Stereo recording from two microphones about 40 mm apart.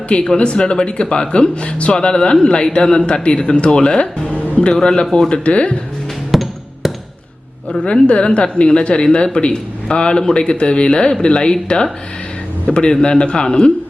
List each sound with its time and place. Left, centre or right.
0.1 s speech: left
3.8 s music: left
4.7 s a man's voice: centre
5.3 s speech: left
6.3 s music: centre
7.8 s speech: left